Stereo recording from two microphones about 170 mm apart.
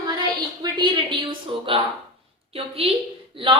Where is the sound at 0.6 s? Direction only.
25° right (ahead or behind).